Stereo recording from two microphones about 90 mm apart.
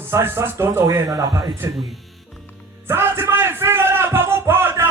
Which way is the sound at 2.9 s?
25° right (ahead or behind).